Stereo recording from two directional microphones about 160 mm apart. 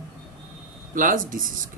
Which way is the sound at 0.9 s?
60° right (ahead or behind).